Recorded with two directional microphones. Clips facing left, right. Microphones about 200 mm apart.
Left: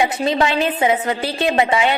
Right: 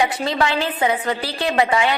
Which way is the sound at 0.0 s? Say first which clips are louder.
Left 3 dB; 20° left (ahead or behind).